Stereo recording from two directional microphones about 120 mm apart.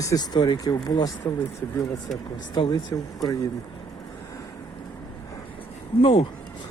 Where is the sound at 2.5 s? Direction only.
40° left (ahead or behind).